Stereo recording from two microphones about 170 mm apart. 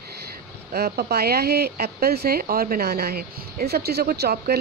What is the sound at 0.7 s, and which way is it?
Speech, 65° right (ahead or behind).